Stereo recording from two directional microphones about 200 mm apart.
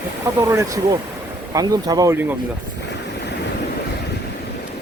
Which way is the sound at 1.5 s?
20° right (ahead or behind).